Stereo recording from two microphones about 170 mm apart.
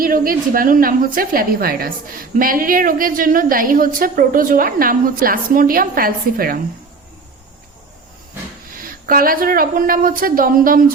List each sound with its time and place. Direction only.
0.0 s a woman's voice: 55° right (ahead or behind)
8.8 s a woman's voice: 55° right (ahead or behind)